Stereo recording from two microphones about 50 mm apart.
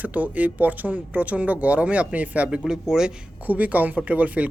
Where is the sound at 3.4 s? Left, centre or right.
Right.